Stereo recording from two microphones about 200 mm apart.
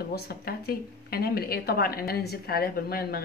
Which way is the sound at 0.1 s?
50° left (ahead or behind).